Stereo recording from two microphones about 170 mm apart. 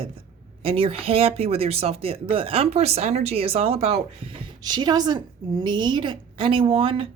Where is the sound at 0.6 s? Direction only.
35° right (ahead or behind).